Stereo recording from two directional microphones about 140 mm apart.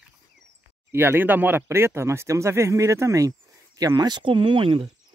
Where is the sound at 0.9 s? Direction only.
15° right (ahead or behind).